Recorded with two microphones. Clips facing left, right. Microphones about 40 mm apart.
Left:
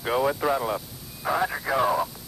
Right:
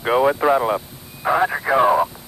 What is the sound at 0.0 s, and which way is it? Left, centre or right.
Speech, right.